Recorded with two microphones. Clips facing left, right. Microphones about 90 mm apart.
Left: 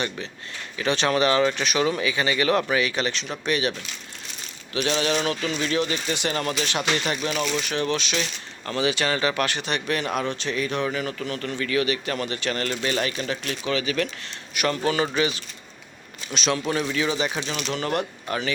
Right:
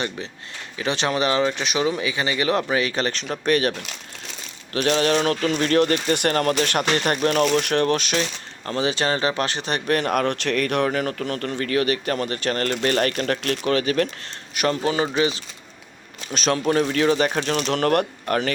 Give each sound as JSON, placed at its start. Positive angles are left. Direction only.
{"t": 0.8, "sound": "speech", "side_deg": -25}
{"t": 14.8, "sound": "speech", "side_deg": -25}
{"t": 16.3, "sound": "speech", "side_deg": -45}